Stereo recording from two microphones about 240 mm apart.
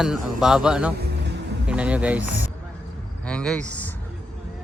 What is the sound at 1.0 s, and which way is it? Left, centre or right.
Music, right.